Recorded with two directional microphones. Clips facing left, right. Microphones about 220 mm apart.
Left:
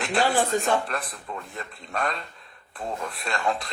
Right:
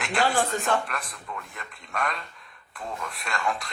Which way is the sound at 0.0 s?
35° left (ahead or behind).